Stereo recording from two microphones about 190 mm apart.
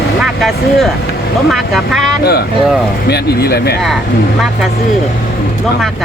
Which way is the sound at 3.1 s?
60° left (ahead or behind).